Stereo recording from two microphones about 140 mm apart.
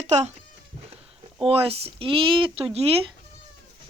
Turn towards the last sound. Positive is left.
turn(degrees=-45)  # may be behind; listen again after turning